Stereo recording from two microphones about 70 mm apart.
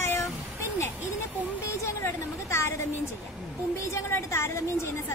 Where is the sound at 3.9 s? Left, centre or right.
Left.